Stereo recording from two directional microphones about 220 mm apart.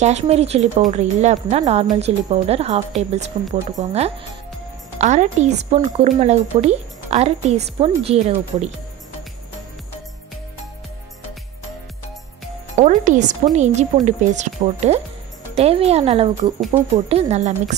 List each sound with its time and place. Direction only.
0.0 s a woman's voice: 30° right (ahead or behind)
12.7 s a woman's voice: 35° right (ahead or behind)